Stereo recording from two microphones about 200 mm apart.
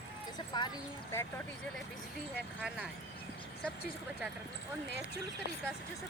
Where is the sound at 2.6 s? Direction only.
5° right (ahead or behind).